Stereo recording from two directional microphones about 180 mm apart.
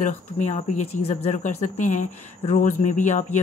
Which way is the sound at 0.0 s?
40° left (ahead or behind).